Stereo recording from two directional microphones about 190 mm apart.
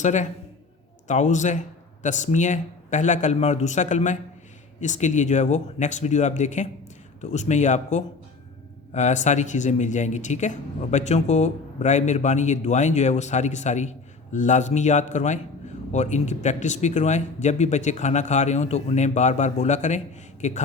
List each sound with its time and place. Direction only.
0.0 s speech: 40° left (ahead or behind)